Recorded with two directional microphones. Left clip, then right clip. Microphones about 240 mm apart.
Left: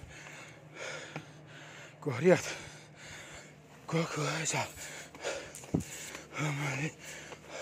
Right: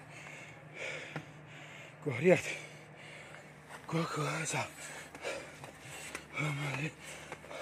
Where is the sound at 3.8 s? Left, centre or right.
Centre.